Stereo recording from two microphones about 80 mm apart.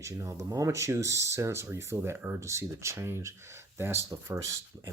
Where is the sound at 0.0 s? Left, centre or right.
Right.